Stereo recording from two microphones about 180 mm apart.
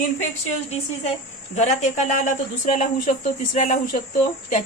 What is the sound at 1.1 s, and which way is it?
Speech, 40° left (ahead or behind).